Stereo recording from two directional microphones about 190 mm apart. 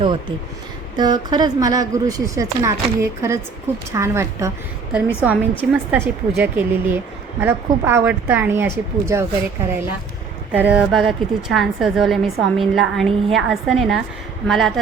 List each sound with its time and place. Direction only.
0.0 s speech: 25° right (ahead or behind)
10.5 s a woman's voice: 10° right (ahead or behind)